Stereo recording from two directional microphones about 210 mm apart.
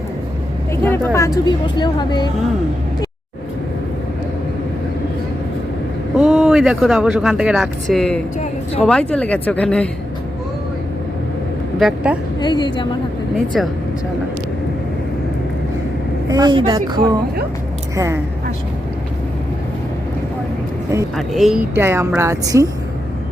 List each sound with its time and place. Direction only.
0.7 s speech: 10° left (ahead or behind)
6.1 s speech: 5° right (ahead or behind)
11.8 s speech: centre (ahead or behind)
12.4 s speech: 20° left (ahead or behind)
16.3 s a woman's voice: 20° right (ahead or behind)
21.2 s a woman's voice: centre (ahead or behind)